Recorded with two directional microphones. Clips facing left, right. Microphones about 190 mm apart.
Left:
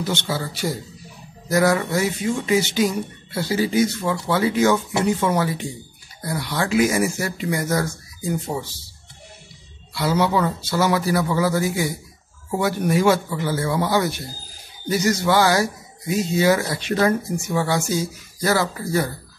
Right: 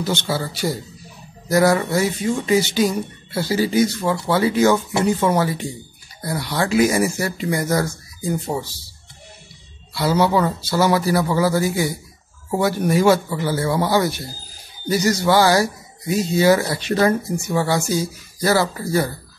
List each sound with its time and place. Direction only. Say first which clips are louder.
0.0 s speech: right 2 dB; 35° right (ahead or behind)
9.9 s speech: right 2 dB; 35° right (ahead or behind)